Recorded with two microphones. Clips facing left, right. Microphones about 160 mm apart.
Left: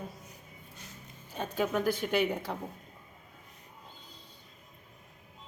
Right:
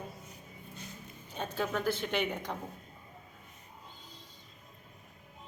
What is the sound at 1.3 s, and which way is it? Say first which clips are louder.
A woman's voice: left 3 dB; 10° left (ahead or behind).